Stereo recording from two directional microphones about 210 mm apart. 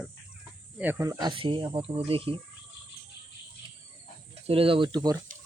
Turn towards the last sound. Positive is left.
turn(degrees=-20)  # may be behind; listen again after turning